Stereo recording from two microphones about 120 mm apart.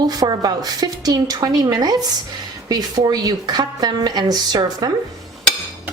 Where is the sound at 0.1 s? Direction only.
35° right (ahead or behind).